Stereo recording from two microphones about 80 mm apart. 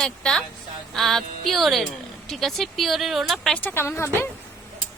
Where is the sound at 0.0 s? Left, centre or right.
Centre.